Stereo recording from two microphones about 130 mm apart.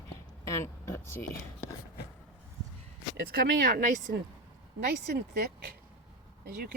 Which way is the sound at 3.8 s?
75° right (ahead or behind).